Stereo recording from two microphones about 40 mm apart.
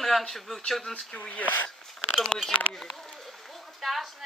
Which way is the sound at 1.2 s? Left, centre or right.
Left.